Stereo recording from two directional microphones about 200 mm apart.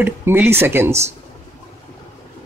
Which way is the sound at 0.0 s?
10° right (ahead or behind).